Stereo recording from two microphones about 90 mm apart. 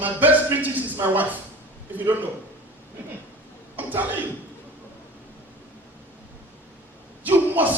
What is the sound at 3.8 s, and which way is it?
Speech, 20° right (ahead or behind).